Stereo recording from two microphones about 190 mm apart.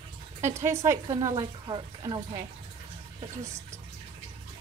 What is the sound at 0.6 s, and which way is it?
Speech, 15° right (ahead or behind).